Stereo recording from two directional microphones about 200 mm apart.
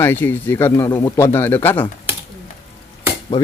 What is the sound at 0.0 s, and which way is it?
Speech, 10° left (ahead or behind).